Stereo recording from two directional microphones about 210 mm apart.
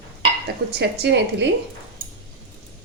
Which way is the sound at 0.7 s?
50° right (ahead or behind).